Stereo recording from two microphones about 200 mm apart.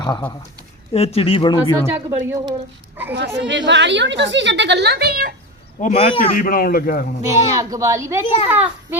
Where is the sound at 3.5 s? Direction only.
65° right (ahead or behind).